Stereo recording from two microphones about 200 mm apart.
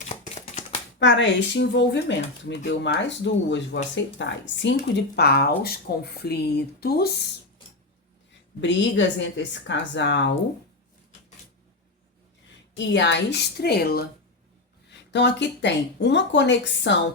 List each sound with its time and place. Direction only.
0.1 s shuffling cards: 35° left (ahead or behind)
0.9 s speech: 65° left (ahead or behind)
8.6 s speech: 65° left (ahead or behind)
12.7 s speech: 65° left (ahead or behind)
15.1 s speech: 60° left (ahead or behind)